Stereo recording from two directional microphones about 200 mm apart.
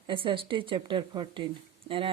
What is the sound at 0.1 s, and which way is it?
A woman's voice, 25° right (ahead or behind).